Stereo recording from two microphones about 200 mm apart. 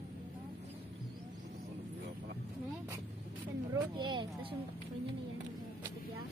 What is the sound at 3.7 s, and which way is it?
Speech, 20° right (ahead or behind).